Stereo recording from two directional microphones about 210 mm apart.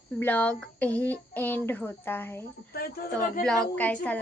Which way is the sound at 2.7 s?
45° left (ahead or behind).